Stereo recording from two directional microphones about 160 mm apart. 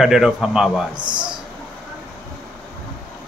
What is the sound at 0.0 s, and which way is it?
Speech, 5° right (ahead or behind).